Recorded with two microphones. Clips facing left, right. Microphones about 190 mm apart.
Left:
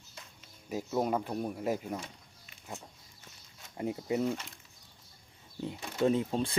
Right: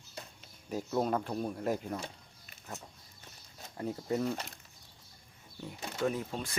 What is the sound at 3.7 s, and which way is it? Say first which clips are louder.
Speech: left 2 dB; 15° left (ahead or behind).